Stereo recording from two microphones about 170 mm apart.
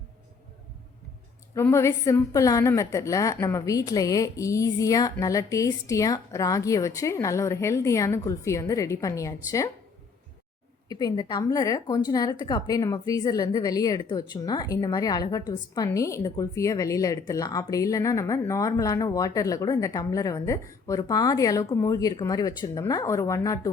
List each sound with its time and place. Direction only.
1.5 s a woman's voice: 15° left (ahead or behind)
10.8 s a woman's voice: 25° left (ahead or behind)